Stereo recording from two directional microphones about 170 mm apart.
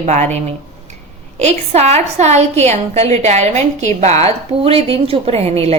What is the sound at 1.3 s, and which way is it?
A woman's voice, 40° right (ahead or behind).